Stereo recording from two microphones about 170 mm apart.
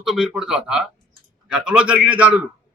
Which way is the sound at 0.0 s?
Centre (ahead or behind).